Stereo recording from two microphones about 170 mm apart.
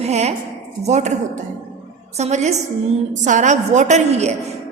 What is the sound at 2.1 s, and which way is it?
A woman's voice, 40° right (ahead or behind).